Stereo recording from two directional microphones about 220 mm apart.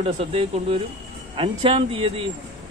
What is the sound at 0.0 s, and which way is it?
Speech, 25° right (ahead or behind).